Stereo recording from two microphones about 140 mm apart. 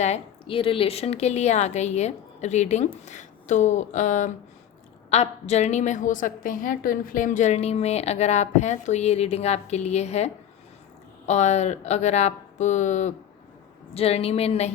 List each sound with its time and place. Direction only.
0.0 s a woman's voice: 45° left (ahead or behind); by 4.3 s 60° left (ahead or behind)
5.1 s a woman's voice: 50° left (ahead or behind)
13.9 s a woman's voice: 45° left (ahead or behind)